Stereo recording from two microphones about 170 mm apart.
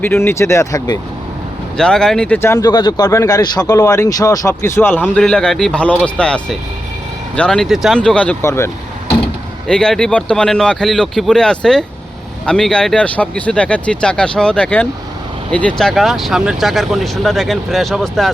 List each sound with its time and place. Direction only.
0.0 s speech: 15° left (ahead or behind)
1.7 s speech: 5° left (ahead or behind)
9.6 s speech: 5° left (ahead or behind)